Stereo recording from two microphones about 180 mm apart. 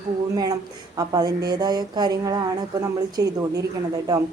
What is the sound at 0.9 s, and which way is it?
A woman's voice, 20° right (ahead or behind).